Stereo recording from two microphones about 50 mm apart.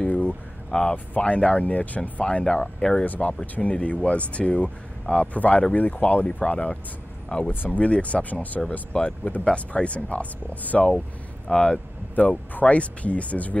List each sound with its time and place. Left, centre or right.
0.0 s a sound: left
0.7 s speech: centre
0.9 s speech: left
2.2 s speech: centre
3.1 s speech: left
8.9 s speech: centre
11.4 s speech: centre